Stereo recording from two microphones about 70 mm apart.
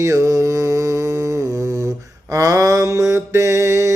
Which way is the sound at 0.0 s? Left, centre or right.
Right.